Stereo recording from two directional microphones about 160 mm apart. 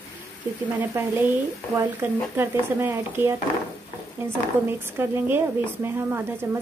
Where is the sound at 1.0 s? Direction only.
15° right (ahead or behind).